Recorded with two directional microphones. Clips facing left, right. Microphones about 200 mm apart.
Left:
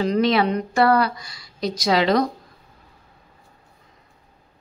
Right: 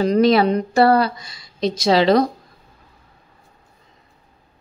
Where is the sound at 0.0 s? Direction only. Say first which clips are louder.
Right 4 dB; 40° right (ahead or behind).